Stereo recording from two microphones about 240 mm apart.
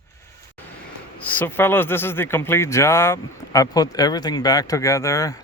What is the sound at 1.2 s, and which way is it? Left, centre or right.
A man's voice, centre.